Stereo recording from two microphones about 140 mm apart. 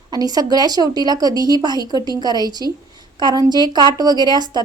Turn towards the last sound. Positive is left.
turn(degrees=-30)  # may be behind; listen again after turning